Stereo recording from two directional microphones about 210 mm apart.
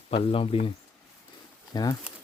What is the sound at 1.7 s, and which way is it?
Speech, 20° left (ahead or behind).